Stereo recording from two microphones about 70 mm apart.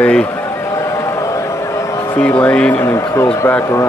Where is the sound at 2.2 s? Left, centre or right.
Left.